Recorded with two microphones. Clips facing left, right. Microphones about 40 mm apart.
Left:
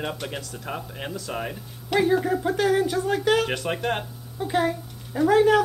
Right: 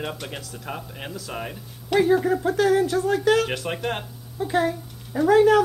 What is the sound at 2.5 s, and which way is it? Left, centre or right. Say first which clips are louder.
Speech: right 2 dB; centre.